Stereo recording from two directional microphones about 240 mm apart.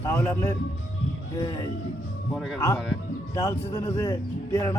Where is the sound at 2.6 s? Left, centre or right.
Centre.